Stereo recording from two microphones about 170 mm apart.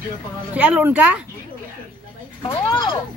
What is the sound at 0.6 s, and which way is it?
Speech, 10° right (ahead or behind).